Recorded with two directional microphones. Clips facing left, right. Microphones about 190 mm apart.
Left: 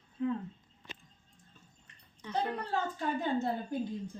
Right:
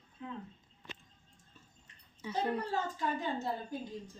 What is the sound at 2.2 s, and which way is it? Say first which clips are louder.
Speech: even; 10° right (ahead or behind).